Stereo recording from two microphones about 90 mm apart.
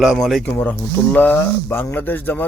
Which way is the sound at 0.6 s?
15° left (ahead or behind).